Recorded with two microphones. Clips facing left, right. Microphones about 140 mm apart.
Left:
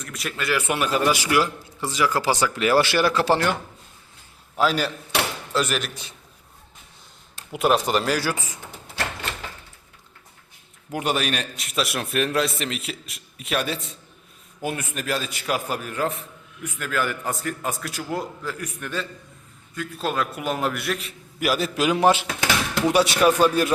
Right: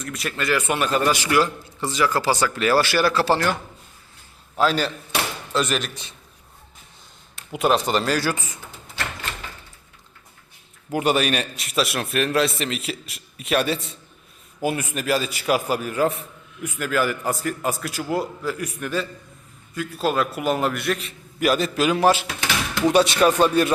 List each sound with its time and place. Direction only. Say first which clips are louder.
0.0 s a man's voice: right 3 dB; centre (ahead or behind)
7.5 s a man's voice: even; 5° left (ahead or behind)
10.9 s a man's voice: right 4 dB; 5° right (ahead or behind)